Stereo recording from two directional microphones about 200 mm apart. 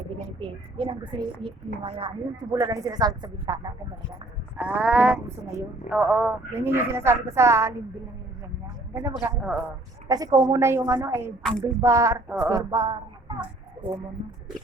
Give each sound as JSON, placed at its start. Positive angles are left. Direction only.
{"t": 0.3, "sound": "a woman's voice", "side_deg": -25}
{"t": 4.5, "sound": "livestock", "side_deg": -5}
{"t": 5.9, "sound": "speech", "side_deg": -5}
{"t": 9.0, "sound": "speech", "side_deg": -10}
{"t": 10.1, "sound": "speech", "side_deg": -20}